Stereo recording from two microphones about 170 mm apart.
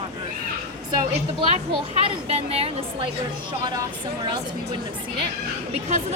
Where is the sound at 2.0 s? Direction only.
35° right (ahead or behind).